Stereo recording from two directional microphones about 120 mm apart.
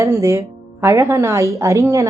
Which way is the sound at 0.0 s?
25° right (ahead or behind).